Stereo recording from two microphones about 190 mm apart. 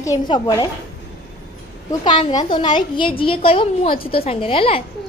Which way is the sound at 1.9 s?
20° left (ahead or behind).